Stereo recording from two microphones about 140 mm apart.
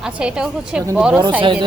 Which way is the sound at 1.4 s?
35° right (ahead or behind).